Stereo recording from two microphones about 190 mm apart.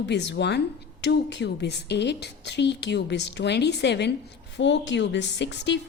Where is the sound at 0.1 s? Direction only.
65° left (ahead or behind).